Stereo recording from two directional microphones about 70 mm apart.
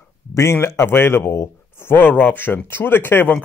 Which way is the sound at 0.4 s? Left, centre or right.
Left.